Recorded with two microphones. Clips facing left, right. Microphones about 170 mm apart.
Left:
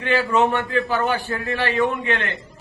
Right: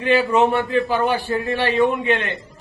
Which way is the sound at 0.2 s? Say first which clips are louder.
Right 2 dB; 25° right (ahead or behind).